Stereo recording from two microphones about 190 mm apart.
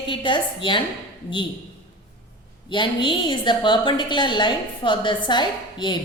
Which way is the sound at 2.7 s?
25° left (ahead or behind).